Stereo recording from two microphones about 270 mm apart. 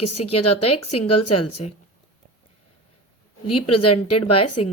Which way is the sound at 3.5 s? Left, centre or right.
Left.